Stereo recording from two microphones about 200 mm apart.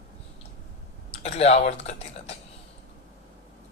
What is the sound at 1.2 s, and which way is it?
Speech, 30° left (ahead or behind).